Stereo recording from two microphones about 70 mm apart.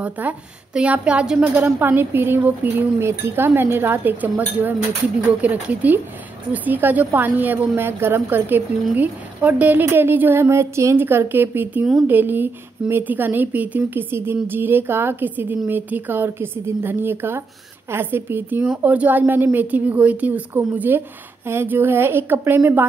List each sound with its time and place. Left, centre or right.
0.0 s a woman's voice: centre
3.0 s a woman's voice: right
11.0 s a woman's voice: right